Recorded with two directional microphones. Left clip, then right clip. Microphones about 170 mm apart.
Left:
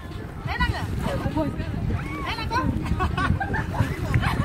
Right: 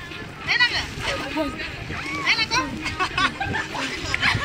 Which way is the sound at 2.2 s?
55° left (ahead or behind).